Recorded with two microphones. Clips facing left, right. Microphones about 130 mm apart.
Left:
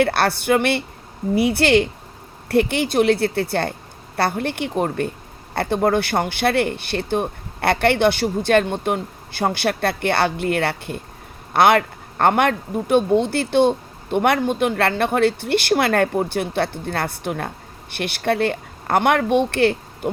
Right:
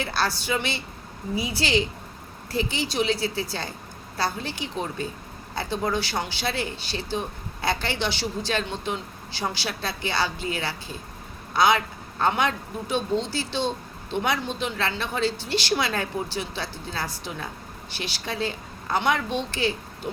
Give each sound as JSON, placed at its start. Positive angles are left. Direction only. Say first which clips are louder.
{"t": 0.0, "sound": "speech", "louder": "left 9 dB", "side_deg": 60}